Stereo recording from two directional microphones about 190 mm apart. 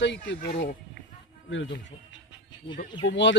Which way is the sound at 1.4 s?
75° left (ahead or behind).